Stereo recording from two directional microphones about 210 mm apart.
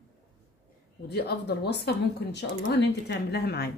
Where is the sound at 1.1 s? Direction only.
50° left (ahead or behind).